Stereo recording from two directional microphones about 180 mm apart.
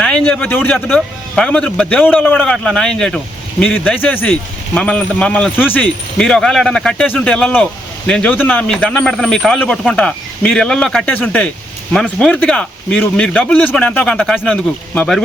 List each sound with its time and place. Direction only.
0.0 s a man's voice: 5° left (ahead or behind)